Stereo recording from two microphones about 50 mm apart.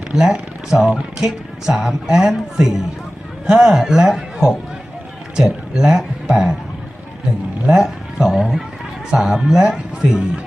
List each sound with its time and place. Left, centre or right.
0.1 s speech: centre
7.7 s speech: centre